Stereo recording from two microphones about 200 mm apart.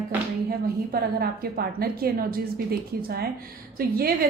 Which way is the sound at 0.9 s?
50° right (ahead or behind).